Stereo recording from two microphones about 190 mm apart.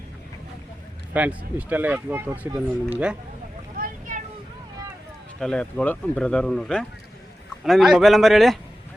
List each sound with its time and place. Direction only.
1.1 s speech: 10° right (ahead or behind)
2.5 s speech: 25° right (ahead or behind)
3.8 s boat: 50° right (ahead or behind)
5.4 s speech: 5° left (ahead or behind)